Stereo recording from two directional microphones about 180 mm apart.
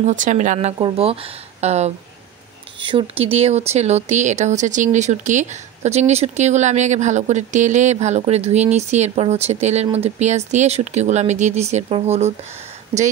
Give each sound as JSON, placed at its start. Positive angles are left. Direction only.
{"t": 0.0, "sound": "speech", "side_deg": -45}